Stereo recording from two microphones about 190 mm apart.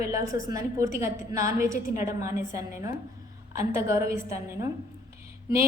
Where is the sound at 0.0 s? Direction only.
15° right (ahead or behind).